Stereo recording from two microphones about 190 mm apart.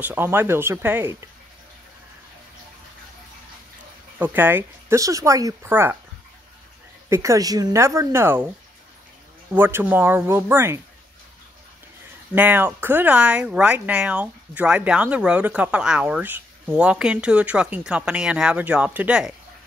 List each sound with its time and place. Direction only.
0.0 s speech: 10° right (ahead or behind)
4.2 s speech: 10° right (ahead or behind)
7.1 s speech: 15° right (ahead or behind)
9.5 s speech: 10° right (ahead or behind)
12.4 s speech: 10° right (ahead or behind)